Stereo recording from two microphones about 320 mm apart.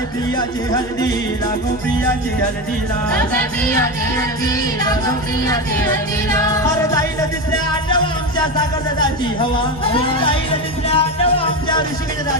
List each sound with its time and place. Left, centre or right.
6.3 s music: centre
7.9 s speech: centre
9.9 s music: centre